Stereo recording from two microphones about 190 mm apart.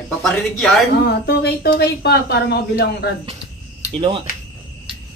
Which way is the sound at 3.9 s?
30° right (ahead or behind).